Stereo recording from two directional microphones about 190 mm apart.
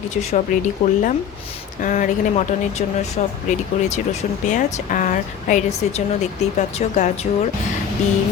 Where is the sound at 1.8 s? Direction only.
40° left (ahead or behind).